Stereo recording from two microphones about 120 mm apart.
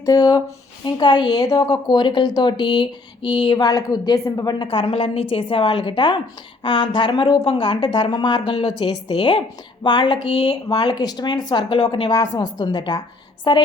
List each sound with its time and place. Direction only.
0.0 s a woman's voice: 30° left (ahead or behind)
4.7 s a woman's voice: 50° left (ahead or behind)
10.3 s speech: 55° left (ahead or behind)
10.7 s a woman's voice: 35° left (ahead or behind)